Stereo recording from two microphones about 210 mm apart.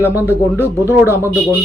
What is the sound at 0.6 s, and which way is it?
Speech, 10° left (ahead or behind).